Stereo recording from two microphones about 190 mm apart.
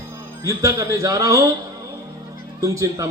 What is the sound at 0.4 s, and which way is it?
Speech, 15° right (ahead or behind).